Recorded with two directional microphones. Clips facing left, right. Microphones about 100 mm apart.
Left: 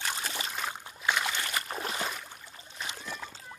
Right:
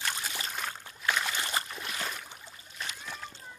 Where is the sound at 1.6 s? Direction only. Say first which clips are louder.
Left 5 dB; 40° left (ahead or behind).